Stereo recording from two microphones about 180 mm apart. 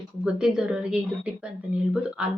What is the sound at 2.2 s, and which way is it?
Speech, 5° right (ahead or behind).